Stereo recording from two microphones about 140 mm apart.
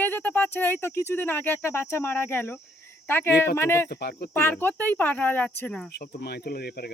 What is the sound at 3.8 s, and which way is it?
Speech, 90° left.